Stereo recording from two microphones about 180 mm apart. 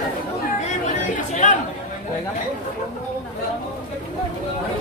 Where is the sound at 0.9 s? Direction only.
40° left (ahead or behind).